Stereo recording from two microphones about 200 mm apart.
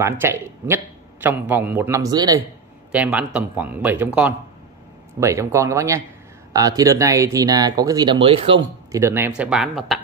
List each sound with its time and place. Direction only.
0.0 s speech: 10° right (ahead or behind)
2.9 s speech: 5° right (ahead or behind); by 8.6 s 25° right (ahead or behind)
8.9 s speech: 10° right (ahead or behind)